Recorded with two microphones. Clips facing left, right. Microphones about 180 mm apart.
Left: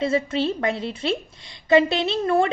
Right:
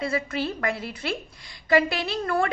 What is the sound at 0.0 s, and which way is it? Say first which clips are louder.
A woman's voice: left 5 dB; 25° left (ahead or behind).